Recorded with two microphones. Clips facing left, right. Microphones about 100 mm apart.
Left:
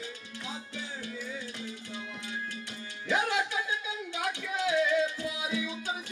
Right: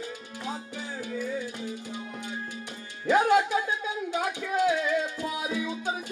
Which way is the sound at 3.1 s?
45° right (ahead or behind).